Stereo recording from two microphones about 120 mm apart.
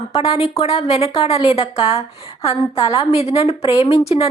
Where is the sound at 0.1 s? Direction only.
55° left (ahead or behind).